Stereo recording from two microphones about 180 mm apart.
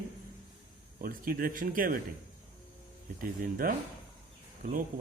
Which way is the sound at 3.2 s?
55° right (ahead or behind).